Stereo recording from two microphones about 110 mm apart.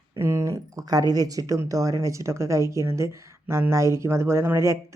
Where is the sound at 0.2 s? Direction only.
25° right (ahead or behind).